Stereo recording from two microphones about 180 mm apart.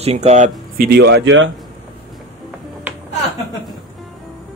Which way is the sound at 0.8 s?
65° right (ahead or behind).